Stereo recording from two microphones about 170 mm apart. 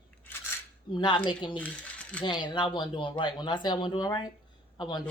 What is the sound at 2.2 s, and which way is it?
Speech, 25° left (ahead or behind).